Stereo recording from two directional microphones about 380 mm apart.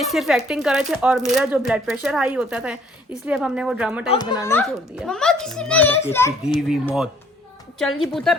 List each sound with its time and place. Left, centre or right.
0.0 s speech: centre
4.1 s speech: centre